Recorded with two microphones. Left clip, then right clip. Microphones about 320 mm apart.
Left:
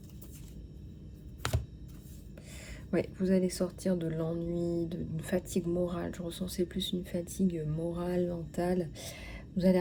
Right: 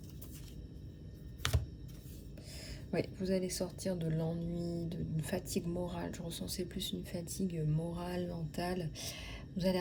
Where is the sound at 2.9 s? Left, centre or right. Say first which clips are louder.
Left 5 dB; centre.